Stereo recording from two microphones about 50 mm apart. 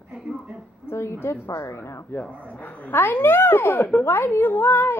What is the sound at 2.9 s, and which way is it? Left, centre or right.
A woman's voice, left.